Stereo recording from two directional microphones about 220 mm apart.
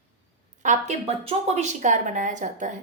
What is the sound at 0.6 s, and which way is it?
A woman's voice, 35° right (ahead or behind).